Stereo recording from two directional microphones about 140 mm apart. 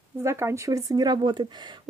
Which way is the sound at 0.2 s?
20° right (ahead or behind).